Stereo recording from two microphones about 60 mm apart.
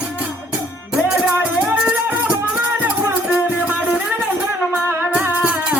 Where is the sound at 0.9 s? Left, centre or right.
Centre.